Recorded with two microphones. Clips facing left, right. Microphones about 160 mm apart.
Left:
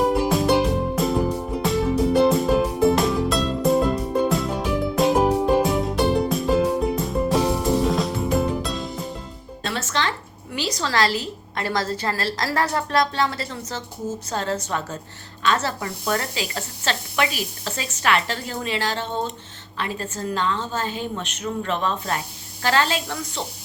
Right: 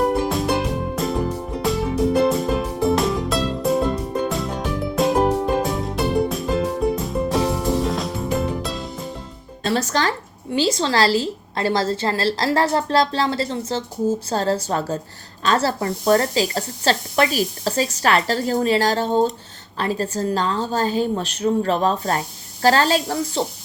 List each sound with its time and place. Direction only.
0.0 s music: centre (ahead or behind)
9.6 s a woman's voice: 40° right (ahead or behind)